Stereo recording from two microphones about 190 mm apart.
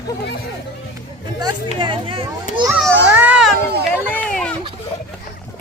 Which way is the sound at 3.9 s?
10° left (ahead or behind).